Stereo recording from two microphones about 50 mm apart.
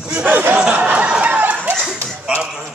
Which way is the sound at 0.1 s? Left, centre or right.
Right.